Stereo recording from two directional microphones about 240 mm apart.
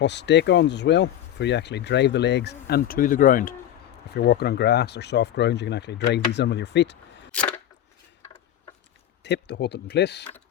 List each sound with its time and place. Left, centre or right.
0.0 s speech: left
9.2 s speech: left